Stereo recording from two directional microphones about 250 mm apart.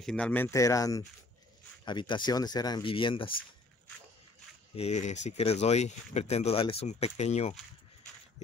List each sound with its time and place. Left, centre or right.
0.0 s speech: centre
4.7 s speech: left